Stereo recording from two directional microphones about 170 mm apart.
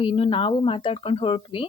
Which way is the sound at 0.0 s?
30° left (ahead or behind).